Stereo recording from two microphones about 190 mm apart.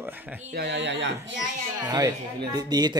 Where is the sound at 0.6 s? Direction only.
65° right (ahead or behind).